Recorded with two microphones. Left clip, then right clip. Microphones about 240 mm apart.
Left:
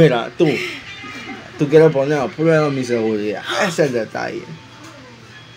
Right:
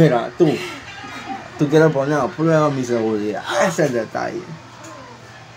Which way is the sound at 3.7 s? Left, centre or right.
Centre.